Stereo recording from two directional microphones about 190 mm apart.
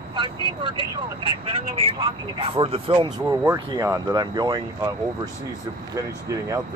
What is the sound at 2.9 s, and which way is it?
Speech, 15° right (ahead or behind).